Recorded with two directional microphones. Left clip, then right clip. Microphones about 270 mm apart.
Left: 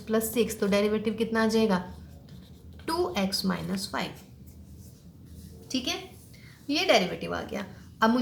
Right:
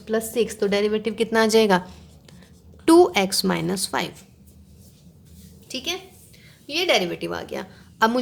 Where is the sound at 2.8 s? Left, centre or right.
Right.